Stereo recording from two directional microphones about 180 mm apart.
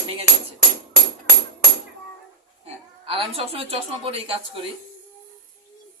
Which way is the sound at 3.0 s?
30° right (ahead or behind).